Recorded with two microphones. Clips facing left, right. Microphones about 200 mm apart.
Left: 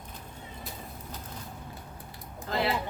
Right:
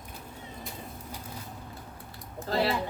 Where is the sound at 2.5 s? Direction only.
35° right (ahead or behind).